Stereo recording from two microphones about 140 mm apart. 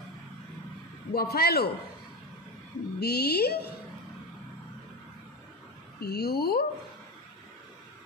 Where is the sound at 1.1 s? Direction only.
90° left.